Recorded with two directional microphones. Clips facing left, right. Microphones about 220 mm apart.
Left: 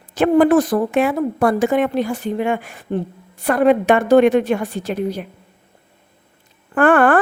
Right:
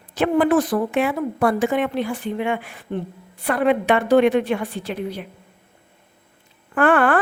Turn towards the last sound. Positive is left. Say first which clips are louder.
# left 4 dB
turn(degrees=50)  # may be behind; listen again after turning